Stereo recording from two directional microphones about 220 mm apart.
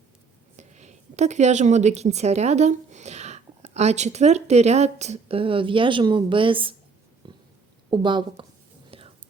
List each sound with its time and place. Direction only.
0.5 s a woman's voice: 30° right (ahead or behind)
7.2 s a sound: 20° right (ahead or behind)
7.9 s speech: 20° right (ahead or behind)
8.9 s whispering: 25° right (ahead or behind)